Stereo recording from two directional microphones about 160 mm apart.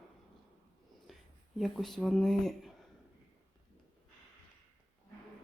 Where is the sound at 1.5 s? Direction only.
Centre (ahead or behind).